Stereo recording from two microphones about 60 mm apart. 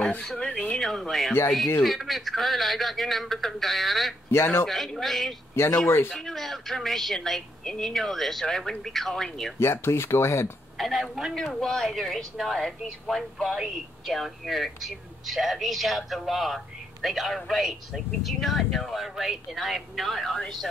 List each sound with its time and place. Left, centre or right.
0.3 s speech: centre
4.3 s speech: left
4.6 s a woman's voice: centre
9.6 s speech: left
10.8 s speech: centre